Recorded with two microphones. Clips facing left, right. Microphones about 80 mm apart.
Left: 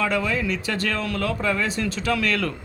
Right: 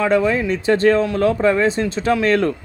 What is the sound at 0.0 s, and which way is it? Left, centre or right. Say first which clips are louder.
A man's voice: right 7 dB; right.